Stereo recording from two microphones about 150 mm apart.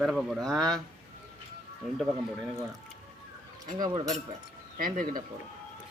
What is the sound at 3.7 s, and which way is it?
Speech, 30° right (ahead or behind).